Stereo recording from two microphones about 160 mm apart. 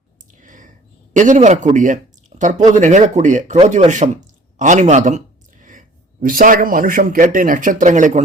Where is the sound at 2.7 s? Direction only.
50° right (ahead or behind).